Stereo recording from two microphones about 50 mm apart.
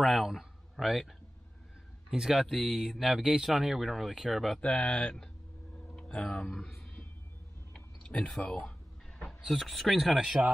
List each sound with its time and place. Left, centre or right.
0.0 s speech: centre
2.0 s speech: centre
4.6 s speech: centre
6.5 s speech: centre
7.7 s a sound: left
8.4 s speech: left
9.5 s speech: centre
10.1 s speech: centre